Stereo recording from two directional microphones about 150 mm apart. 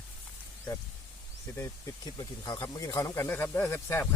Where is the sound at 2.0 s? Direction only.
25° left (ahead or behind).